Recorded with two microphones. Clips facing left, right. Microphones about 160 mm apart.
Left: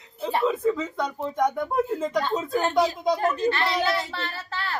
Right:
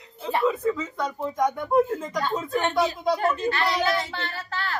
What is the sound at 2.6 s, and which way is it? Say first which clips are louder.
Speech: left 1 dB; 35° left (ahead or behind).